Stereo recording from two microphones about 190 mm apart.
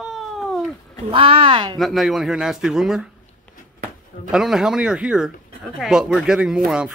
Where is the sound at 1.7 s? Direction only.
Centre (ahead or behind).